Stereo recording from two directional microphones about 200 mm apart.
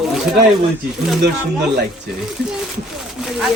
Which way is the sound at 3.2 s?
Centre (ahead or behind).